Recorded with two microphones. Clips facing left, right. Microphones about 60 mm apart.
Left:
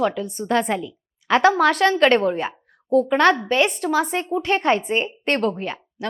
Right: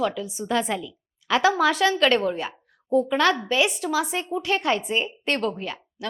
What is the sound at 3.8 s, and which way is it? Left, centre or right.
Speech, left.